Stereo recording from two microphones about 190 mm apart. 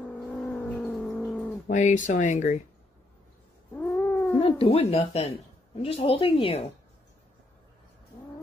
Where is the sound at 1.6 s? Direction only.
40° left (ahead or behind).